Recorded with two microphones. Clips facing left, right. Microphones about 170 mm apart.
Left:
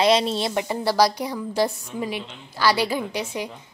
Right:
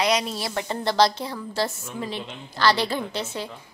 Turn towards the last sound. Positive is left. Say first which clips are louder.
# left 2 dB
turn(degrees=15)  # may be behind; listen again after turning